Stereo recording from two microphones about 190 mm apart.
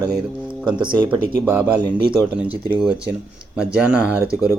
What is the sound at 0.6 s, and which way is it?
Speech, 25° right (ahead or behind).